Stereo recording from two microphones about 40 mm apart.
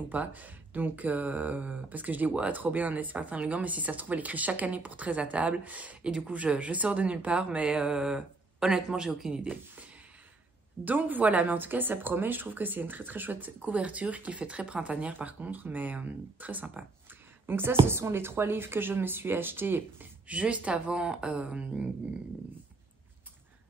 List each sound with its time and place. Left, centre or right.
0.1 s speech: right
7.8 s speech: centre
10.8 s speech: right
13.7 s speech: right
14.4 s speech: right
17.5 s speech: right
20.2 s speech: right